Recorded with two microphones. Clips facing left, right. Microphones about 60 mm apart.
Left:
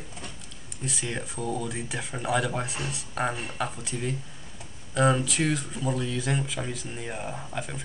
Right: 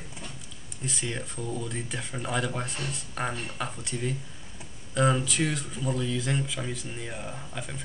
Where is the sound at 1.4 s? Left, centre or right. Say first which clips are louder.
Left 5 dB; left.